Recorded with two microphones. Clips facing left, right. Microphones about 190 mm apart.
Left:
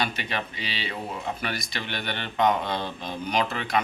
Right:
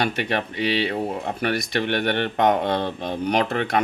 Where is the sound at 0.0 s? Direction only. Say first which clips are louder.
Right 6 dB; 65° right (ahead or behind).